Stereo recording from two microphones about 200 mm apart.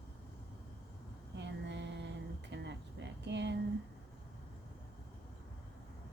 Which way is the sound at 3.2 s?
60° right (ahead or behind).